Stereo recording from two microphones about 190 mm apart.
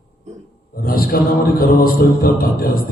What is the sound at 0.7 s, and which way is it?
A man's voice, 50° left (ahead or behind).